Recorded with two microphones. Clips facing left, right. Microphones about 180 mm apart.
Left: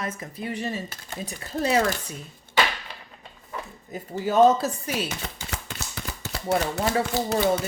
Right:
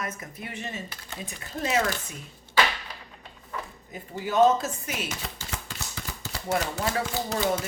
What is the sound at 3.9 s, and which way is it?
Speech, 35° left (ahead or behind).